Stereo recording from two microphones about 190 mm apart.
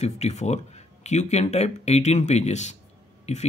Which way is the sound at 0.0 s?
35° left (ahead or behind).